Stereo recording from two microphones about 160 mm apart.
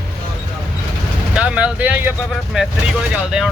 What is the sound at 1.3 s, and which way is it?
Speech, 5° right (ahead or behind).